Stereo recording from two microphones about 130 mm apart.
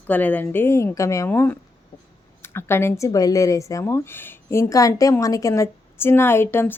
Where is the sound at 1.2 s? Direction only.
15° left (ahead or behind).